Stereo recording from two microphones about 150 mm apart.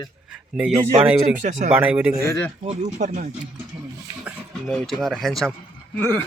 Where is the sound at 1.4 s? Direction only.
50° right (ahead or behind).